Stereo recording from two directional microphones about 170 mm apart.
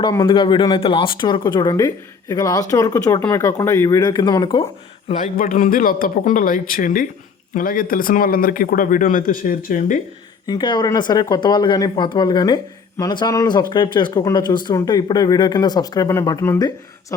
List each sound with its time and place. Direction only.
0.3 s speech: 30° left (ahead or behind)
5.2 s speech: 50° left (ahead or behind)
10.4 s speech: 25° left (ahead or behind)